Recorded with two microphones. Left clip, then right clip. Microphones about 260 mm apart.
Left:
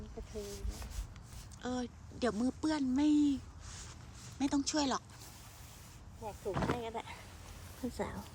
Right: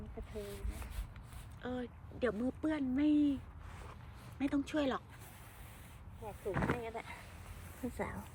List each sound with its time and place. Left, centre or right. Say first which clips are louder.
0.3 s a sound: left 1 dB; centre
1.6 s speech: left 2 dB; centre
4.4 s speech: left 2 dB; centre
6.2 s speech: left 1 dB; centre